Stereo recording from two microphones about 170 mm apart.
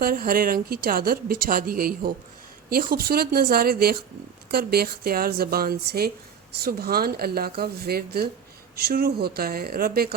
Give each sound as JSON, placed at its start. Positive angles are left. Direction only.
{"t": 0.0, "sound": "a woman's voice", "side_deg": -60}